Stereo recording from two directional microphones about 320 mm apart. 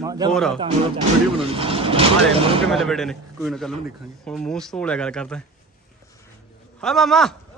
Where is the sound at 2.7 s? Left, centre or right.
Centre.